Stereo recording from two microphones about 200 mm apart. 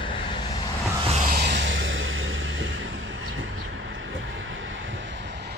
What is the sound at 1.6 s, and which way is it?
Music, 70° right (ahead or behind).